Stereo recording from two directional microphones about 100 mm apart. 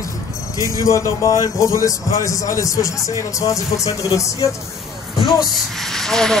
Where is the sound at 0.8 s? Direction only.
30° left (ahead or behind).